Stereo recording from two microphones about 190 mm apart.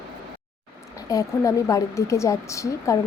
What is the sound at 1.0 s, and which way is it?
Speech, 15° left (ahead or behind).